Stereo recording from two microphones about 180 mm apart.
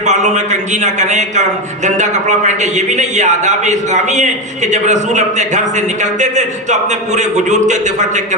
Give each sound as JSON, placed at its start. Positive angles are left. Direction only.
{"t": 0.0, "sound": "a man's voice", "side_deg": -40}